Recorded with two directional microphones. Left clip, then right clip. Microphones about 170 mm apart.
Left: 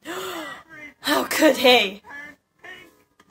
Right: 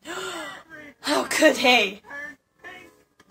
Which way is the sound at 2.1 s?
30° left (ahead or behind).